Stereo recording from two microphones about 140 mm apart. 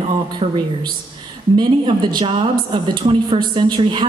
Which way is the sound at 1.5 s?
35° right (ahead or behind).